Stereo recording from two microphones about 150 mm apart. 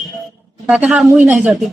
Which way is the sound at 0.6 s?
10° right (ahead or behind).